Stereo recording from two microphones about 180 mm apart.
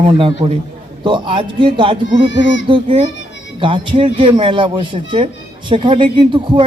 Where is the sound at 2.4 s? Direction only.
90° left.